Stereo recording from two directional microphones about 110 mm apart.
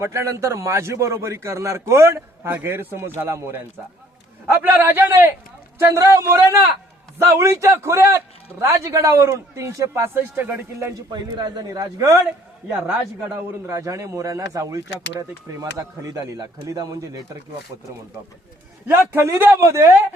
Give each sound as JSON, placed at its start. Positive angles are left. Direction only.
{"t": 0.0, "sound": "a man's voice", "side_deg": -25}
{"t": 4.6, "sound": "a man's voice", "side_deg": -20}
{"t": 11.3, "sound": "a man's voice", "side_deg": -40}
{"t": 19.1, "sound": "a man's voice", "side_deg": -20}